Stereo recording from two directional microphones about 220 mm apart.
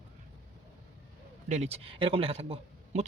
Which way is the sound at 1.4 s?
30° right (ahead or behind).